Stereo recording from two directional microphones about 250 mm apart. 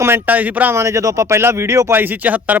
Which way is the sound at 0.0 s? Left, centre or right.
Centre.